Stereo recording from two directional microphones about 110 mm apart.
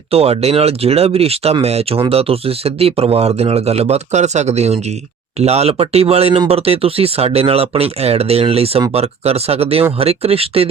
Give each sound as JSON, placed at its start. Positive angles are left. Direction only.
{"t": 0.1, "sound": "speech", "side_deg": -65}